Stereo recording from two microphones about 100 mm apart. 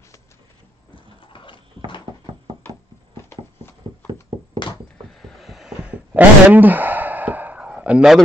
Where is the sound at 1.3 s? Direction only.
55° left (ahead or behind).